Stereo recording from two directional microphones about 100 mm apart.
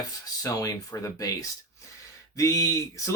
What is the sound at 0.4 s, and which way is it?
Speech, 35° left (ahead or behind).